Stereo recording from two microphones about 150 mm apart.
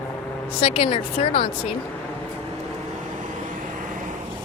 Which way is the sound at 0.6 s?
35° left (ahead or behind).